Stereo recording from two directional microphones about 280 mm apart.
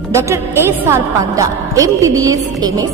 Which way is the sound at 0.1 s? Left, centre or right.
Centre.